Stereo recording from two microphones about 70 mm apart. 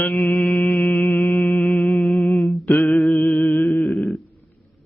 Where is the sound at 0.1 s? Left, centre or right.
Centre.